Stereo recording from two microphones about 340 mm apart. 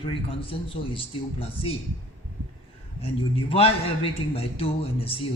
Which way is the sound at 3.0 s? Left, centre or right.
Centre.